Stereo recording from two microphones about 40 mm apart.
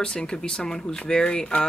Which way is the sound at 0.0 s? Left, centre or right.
Left.